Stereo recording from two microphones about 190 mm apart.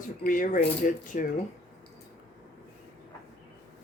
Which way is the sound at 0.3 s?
45° left (ahead or behind).